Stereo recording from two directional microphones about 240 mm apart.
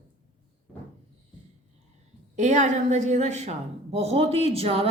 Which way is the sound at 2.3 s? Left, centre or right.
Right.